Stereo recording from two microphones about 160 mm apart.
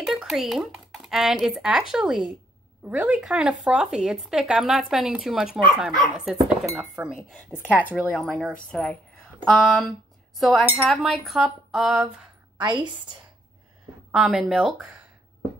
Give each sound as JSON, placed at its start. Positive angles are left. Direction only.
{"t": 0.0, "sound": "speech", "side_deg": 0}
{"t": 7.6, "sound": "a woman's voice", "side_deg": 10}
{"t": 12.5, "sound": "a woman's voice", "side_deg": -30}
{"t": 14.1, "sound": "speech", "side_deg": -5}